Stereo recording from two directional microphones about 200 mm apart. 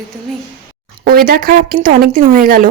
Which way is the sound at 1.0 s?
45° right (ahead or behind).